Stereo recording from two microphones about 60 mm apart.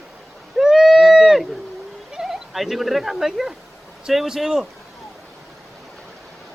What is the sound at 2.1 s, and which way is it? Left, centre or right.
Speech, centre.